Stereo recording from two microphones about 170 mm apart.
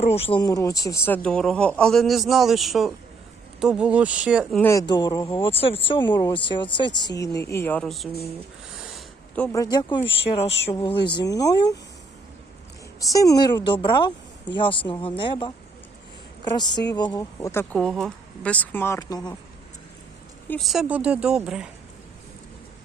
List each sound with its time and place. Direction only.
0.0 s speech: 35° left (ahead or behind); by 4.6 s 5° right (ahead or behind)
4.6 s speech: 20° left (ahead or behind); by 8.1 s centre (ahead or behind)
8.7 s a sound: 5° right (ahead or behind)
9.3 s speech: 15° left (ahead or behind)
10.1 s speech: 35° left (ahead or behind)
13.1 s speech: 20° left (ahead or behind)
17.7 s speech: 5° left (ahead or behind); by 19.4 s 20° left (ahead or behind)
20.6 s speech: centre (ahead or behind)